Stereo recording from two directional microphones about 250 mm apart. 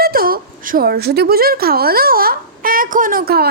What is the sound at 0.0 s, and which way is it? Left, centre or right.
A woman's voice, right.